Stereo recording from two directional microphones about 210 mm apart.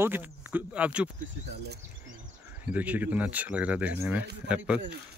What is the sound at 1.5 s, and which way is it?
Speech, 50° right (ahead or behind).